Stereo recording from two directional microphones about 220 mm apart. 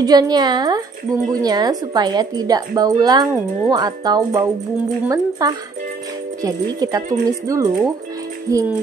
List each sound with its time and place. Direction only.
0.0 s a woman's voice: 20° right (ahead or behind)